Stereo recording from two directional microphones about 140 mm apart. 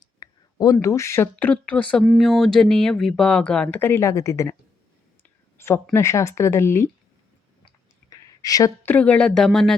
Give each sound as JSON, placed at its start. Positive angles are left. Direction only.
{"t": 0.2, "sound": "a woman's voice", "side_deg": 30}
{"t": 5.5, "sound": "speech", "side_deg": 20}
{"t": 8.1, "sound": "a sound", "side_deg": 25}
{"t": 8.8, "sound": "speech", "side_deg": 10}